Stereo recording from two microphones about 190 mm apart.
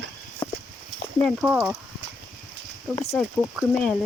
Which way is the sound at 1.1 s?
Centre (ahead or behind).